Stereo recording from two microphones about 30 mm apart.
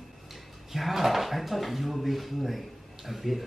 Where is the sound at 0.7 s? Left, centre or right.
Centre.